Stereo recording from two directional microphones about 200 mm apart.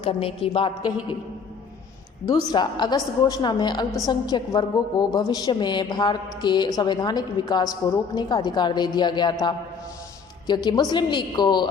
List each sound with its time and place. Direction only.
0.0 s a woman's voice: 25° left (ahead or behind)
2.2 s a woman's voice: 20° left (ahead or behind)
10.4 s a woman's voice: 20° left (ahead or behind)